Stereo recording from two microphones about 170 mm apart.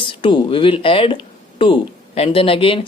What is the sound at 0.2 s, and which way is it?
Speech, 30° left (ahead or behind).